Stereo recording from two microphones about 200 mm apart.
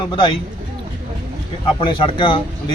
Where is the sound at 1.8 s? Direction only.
25° left (ahead or behind).